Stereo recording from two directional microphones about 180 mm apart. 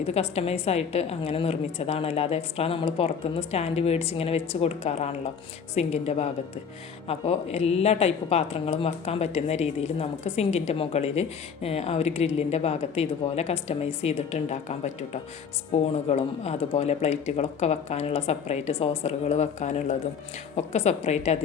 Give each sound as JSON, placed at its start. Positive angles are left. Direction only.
{"t": 0.0, "sound": "speech", "side_deg": 35}